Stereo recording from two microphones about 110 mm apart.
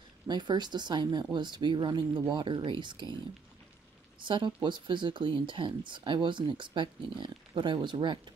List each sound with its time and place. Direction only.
0.3 s speech: 40° right (ahead or behind)
4.2 s speech: 45° right (ahead or behind)